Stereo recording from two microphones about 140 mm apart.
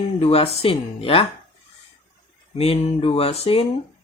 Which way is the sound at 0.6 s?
40° left (ahead or behind).